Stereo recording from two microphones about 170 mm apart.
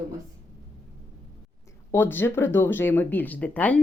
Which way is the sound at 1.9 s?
10° left (ahead or behind).